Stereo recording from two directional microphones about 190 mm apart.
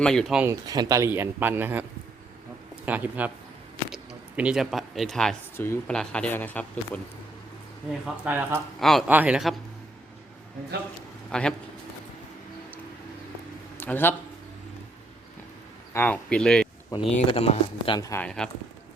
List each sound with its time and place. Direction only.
0.0 s speech: centre (ahead or behind)
0.7 s a man's voice: 20° right (ahead or behind)
2.8 s a man's voice: 10° right (ahead or behind); by 7.0 s 10° left (ahead or behind)
8.0 s a man's voice: 10° right (ahead or behind)
8.8 s speech: centre (ahead or behind)
11.3 s a man's voice: 5° left (ahead or behind)
13.7 s a man's voice: 10° left (ahead or behind)
15.9 s speech: 10° left (ahead or behind)
17.2 s speech: 30° left (ahead or behind); by 18.3 s 15° left (ahead or behind)
18.3 s speech: 5° left (ahead or behind)